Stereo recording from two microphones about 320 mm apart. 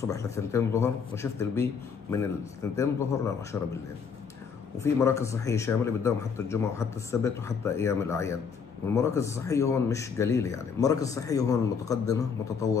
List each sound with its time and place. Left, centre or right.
0.0 s speech: centre
4.7 s speech: centre